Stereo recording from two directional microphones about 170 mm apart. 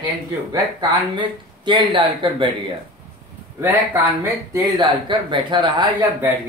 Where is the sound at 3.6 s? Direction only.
10° right (ahead or behind).